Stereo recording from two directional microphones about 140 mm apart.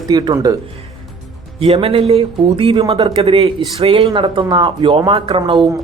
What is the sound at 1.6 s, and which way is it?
Speech, 40° right (ahead or behind).